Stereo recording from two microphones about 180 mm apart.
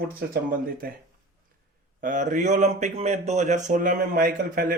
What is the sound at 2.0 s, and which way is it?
A man's voice, 45° right (ahead or behind).